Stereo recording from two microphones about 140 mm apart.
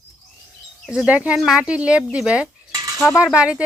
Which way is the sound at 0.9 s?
10° right (ahead or behind).